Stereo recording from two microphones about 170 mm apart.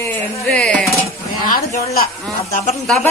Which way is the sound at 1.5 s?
50° left (ahead or behind).